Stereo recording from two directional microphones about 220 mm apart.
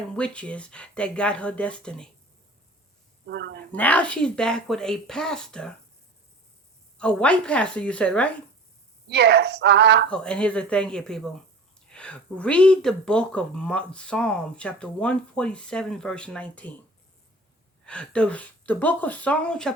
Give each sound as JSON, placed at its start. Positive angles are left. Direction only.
{"t": 0.2, "sound": "speech", "side_deg": 5}
{"t": 3.2, "sound": "speech", "side_deg": -50}
{"t": 3.7, "sound": "speech", "side_deg": 5}
{"t": 7.0, "sound": "speech", "side_deg": 5}
{"t": 9.0, "sound": "a woman's voice", "side_deg": -50}
{"t": 10.1, "sound": "speech", "side_deg": 5}
{"t": 17.8, "sound": "speech", "side_deg": 5}